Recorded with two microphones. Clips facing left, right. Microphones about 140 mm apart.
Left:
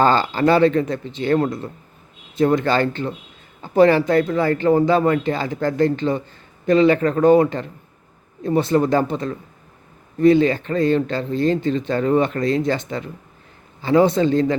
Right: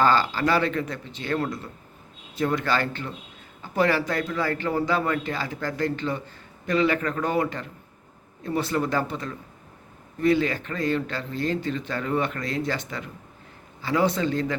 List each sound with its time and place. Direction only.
0.0 s a man's voice: 25° left (ahead or behind)